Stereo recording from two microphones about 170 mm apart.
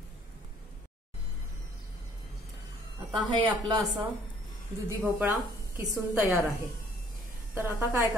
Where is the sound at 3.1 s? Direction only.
25° right (ahead or behind).